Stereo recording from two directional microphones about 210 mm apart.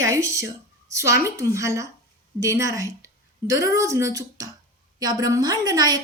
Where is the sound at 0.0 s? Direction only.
15° right (ahead or behind).